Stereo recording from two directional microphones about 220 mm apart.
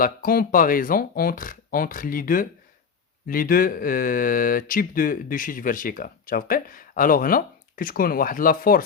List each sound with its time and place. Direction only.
0.0 s speech: 40° left (ahead or behind)